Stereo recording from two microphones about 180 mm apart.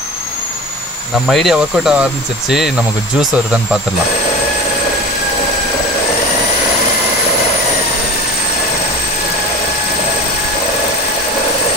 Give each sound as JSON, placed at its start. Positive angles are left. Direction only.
{"t": 1.2, "sound": "speech", "side_deg": 0}